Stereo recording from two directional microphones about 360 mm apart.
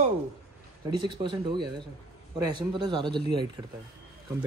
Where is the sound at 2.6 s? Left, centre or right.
Centre.